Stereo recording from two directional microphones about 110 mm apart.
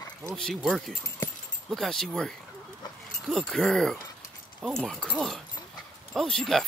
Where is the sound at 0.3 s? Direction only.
5° left (ahead or behind).